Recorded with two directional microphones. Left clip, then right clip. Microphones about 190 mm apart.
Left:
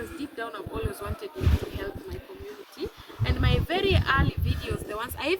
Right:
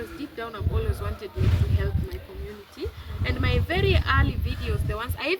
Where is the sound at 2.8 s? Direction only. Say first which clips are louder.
Right 1 dB; 20° left (ahead or behind).